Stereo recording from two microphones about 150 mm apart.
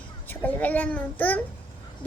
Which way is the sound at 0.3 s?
10° left (ahead or behind).